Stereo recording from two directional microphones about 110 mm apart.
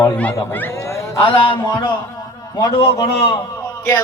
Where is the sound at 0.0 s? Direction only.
15° left (ahead or behind).